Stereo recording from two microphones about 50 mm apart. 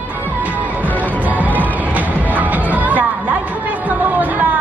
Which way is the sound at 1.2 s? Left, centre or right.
Right.